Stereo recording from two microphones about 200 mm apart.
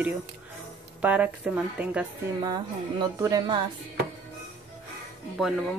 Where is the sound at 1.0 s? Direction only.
5° right (ahead or behind).